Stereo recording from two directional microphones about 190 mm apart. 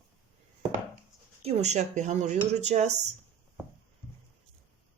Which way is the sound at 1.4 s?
35° right (ahead or behind).